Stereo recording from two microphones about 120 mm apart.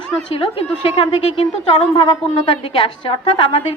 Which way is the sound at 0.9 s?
55° left (ahead or behind).